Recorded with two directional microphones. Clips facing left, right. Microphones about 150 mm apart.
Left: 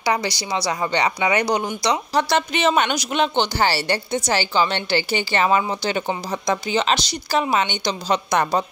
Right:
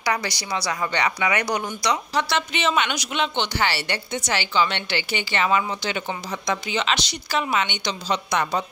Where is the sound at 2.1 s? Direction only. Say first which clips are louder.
Left 4 dB; 40° left (ahead or behind).